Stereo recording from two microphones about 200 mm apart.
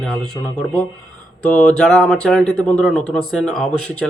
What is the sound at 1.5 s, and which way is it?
Speech, 5° left (ahead or behind).